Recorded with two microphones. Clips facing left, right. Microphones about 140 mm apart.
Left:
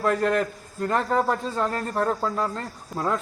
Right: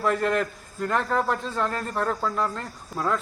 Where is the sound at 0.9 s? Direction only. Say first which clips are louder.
Left 2 dB; 5° left (ahead or behind).